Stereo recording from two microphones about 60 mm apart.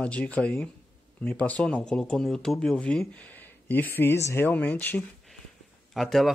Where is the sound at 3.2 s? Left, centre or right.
Left.